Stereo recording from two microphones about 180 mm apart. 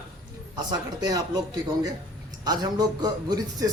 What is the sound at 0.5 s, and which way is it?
Speech, 20° right (ahead or behind).